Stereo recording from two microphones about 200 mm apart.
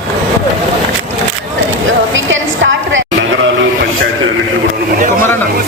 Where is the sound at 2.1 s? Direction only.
70° right (ahead or behind).